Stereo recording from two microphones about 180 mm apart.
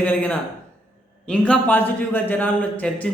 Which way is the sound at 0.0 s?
10° left (ahead or behind).